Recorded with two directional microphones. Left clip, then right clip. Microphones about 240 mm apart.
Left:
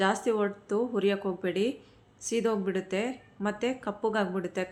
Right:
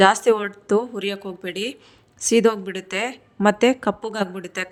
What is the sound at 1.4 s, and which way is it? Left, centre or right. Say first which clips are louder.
Speech: right 3 dB; right.